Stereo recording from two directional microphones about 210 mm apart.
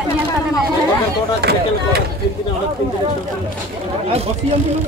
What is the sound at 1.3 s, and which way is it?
Speech, 50° right (ahead or behind).